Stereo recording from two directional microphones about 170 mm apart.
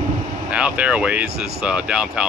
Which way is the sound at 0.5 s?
5° right (ahead or behind).